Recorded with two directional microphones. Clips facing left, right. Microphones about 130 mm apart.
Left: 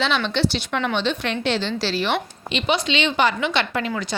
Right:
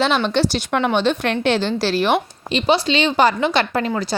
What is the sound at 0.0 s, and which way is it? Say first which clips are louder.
A woman's voice: right 4 dB; 45° right (ahead or behind).